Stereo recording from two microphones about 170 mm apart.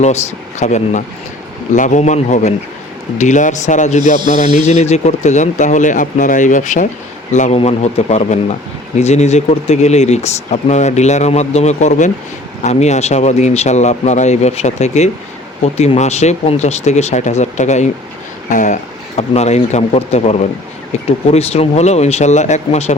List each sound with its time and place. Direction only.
0.6 s speech: 45° left (ahead or behind)